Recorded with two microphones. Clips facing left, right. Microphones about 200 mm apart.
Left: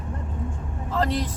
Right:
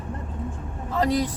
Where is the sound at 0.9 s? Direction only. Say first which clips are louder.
Right 3 dB; 10° right (ahead or behind).